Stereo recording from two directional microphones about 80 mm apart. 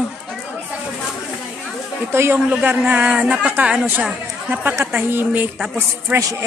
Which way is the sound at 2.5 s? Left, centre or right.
Centre.